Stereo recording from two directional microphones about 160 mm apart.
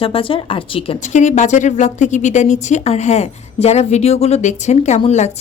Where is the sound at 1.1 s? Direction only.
50° left (ahead or behind).